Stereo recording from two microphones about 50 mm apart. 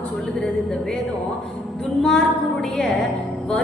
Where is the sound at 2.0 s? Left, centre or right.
Centre.